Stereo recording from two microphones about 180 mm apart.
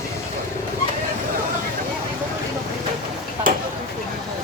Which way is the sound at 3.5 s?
50° right (ahead or behind).